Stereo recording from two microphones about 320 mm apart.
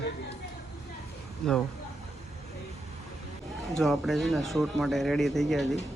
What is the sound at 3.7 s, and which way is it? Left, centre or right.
Speech, centre.